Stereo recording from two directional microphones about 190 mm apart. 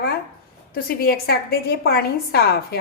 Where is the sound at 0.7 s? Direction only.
55° left (ahead or behind).